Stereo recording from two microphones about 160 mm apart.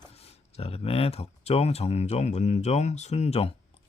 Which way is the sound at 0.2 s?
40° left (ahead or behind).